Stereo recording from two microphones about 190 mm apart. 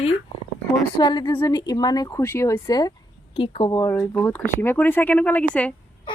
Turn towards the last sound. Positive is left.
turn(degrees=5)  # may be behind; listen again after turning